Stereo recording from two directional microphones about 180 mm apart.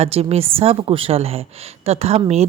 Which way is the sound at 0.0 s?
35° right (ahead or behind).